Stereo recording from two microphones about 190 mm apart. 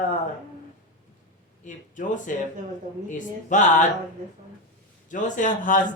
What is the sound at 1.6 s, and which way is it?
Speech, 40° left (ahead or behind).